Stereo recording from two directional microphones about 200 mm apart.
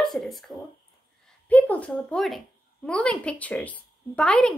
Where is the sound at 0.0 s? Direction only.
Centre (ahead or behind).